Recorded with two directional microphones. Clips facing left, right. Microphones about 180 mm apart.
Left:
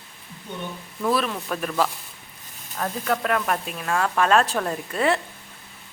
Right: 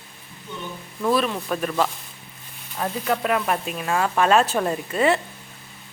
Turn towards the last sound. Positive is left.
turn(degrees=0)  # may be behind; listen again after turning